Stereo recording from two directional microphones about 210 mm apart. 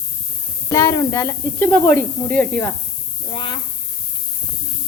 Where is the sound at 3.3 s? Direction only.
25° left (ahead or behind).